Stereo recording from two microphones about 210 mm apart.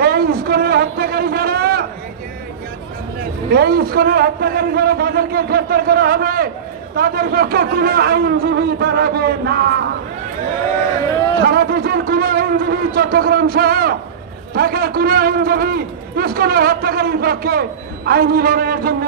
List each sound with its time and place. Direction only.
0.0 s a sound: 45° right (ahead or behind)
3.5 s a man's voice: 50° right (ahead or behind)
11.4 s a man's voice: 45° right (ahead or behind)